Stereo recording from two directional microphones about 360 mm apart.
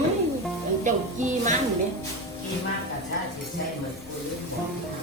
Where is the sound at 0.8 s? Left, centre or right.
Right.